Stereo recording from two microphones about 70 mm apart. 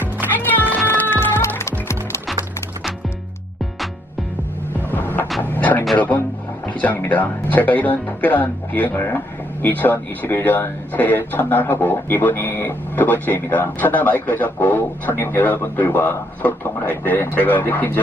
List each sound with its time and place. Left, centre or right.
0.3 s music: left
4.9 s music: left
5.4 s a sound: left
6.0 s speech: left
9.0 s speech: left
9.6 s speech: left